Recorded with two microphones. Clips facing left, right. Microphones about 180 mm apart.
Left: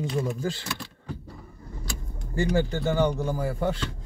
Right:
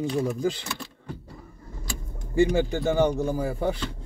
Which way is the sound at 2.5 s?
15° right (ahead or behind).